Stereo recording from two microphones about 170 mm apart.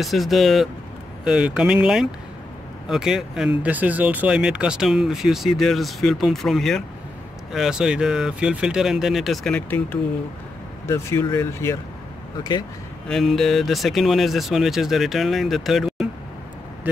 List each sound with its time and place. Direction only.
0.0 s speech: centre (ahead or behind); by 11.8 s 15° left (ahead or behind)
13.1 s speech: centre (ahead or behind)
16.9 s vehicle: 10° right (ahead or behind)